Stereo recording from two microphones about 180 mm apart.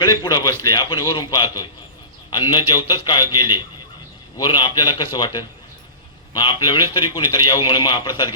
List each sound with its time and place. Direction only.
0.0 s a man's voice: 20° left (ahead or behind)